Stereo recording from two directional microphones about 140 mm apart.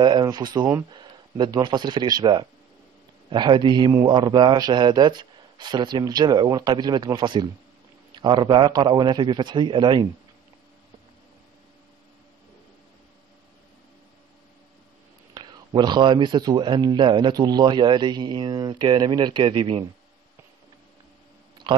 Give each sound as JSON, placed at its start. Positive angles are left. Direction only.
{"t": 0.0, "sound": "speech", "side_deg": -30}
{"t": 15.3, "sound": "speech", "side_deg": -30}
{"t": 21.7, "sound": "a sound", "side_deg": -40}